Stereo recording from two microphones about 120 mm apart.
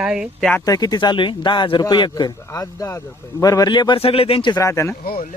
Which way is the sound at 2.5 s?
25° left (ahead or behind).